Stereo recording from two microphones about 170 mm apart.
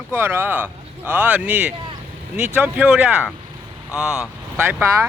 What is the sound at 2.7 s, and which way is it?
Speech, 5° right (ahead or behind).